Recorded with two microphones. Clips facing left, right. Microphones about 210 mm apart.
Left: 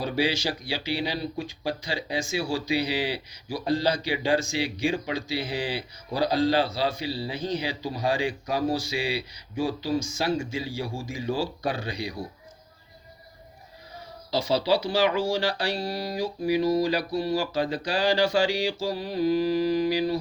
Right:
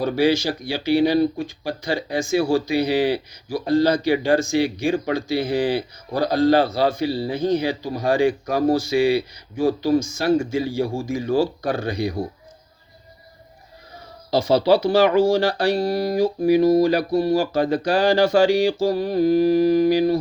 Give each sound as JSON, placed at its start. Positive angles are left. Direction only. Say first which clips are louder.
{"t": 0.0, "sound": "speech", "louder": "right 7 dB", "side_deg": -50}
{"t": 14.3, "sound": "speech", "louder": "right 7 dB", "side_deg": -50}